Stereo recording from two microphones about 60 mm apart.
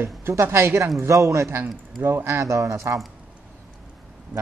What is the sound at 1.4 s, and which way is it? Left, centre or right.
Speech, right.